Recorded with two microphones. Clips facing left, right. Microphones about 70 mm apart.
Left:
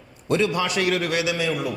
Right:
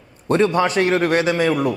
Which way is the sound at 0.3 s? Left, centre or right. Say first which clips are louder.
Right 5 dB; right.